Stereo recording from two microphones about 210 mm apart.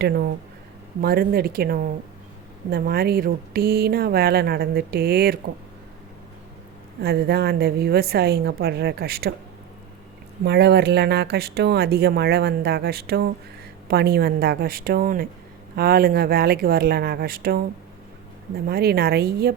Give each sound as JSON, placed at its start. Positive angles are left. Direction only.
{"t": 1.0, "sound": "speech", "side_deg": -45}
{"t": 7.0, "sound": "speech", "side_deg": -50}
{"t": 10.4, "sound": "speech", "side_deg": -50}